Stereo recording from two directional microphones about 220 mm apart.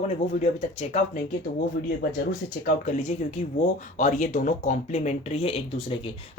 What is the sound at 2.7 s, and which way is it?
Speech, 30° left (ahead or behind).